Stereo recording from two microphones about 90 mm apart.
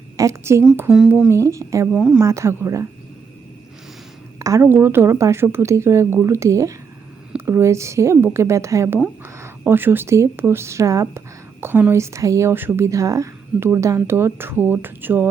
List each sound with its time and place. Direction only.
0.2 s a woman's voice: 35° right (ahead or behind)
0.9 s speech: 10° right (ahead or behind)
1.3 s a woman's voice: 35° right (ahead or behind)
1.9 s speech: 10° right (ahead or behind)
2.2 s a woman's voice: 35° right (ahead or behind)
4.4 s a sound: 40° right (ahead or behind)
4.6 s a woman's voice: 25° right (ahead or behind)